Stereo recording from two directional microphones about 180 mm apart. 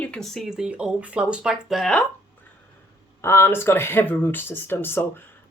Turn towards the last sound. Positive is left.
turn(degrees=10)  # may be behind; listen again after turning